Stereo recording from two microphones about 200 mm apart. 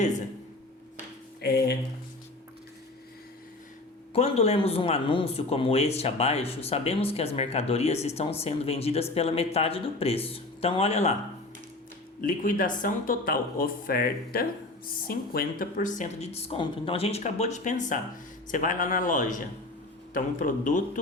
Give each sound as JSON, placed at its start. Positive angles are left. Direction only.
{"t": 1.4, "sound": "a sound", "side_deg": 50}
{"t": 4.1, "sound": "speech", "side_deg": 30}
{"t": 12.2, "sound": "speech", "side_deg": 45}